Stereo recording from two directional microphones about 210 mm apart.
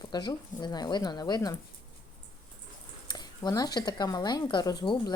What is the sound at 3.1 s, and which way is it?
Speech, 20° left (ahead or behind).